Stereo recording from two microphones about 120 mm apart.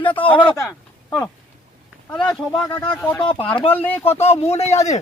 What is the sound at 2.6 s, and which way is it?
Speech, 35° left (ahead or behind).